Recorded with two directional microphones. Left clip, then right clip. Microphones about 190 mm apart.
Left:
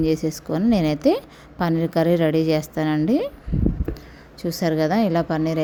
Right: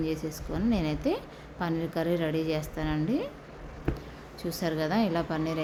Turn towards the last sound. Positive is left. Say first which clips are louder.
# left 8 dB
turn(degrees=40)  # may be behind; listen again after turning